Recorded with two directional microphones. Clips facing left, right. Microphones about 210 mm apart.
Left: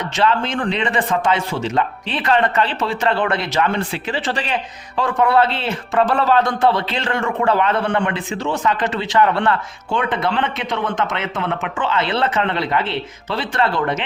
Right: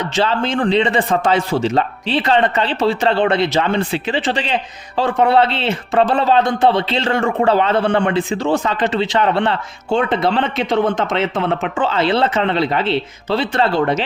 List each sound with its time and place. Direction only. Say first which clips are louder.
0.2 s a man's voice: right 2 dB; 30° right (ahead or behind)